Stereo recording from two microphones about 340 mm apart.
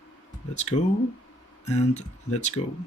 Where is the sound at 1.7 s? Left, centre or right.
Centre.